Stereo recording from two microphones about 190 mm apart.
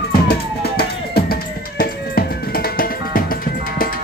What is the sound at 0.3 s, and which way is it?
Music, 55° left (ahead or behind).